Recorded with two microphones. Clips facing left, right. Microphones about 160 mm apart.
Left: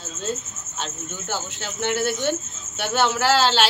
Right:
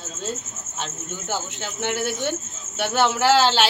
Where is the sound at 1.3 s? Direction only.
15° right (ahead or behind).